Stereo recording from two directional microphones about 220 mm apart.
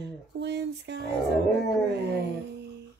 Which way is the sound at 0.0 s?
50° right (ahead or behind).